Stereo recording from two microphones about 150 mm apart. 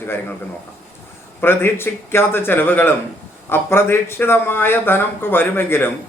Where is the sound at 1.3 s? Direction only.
15° left (ahead or behind).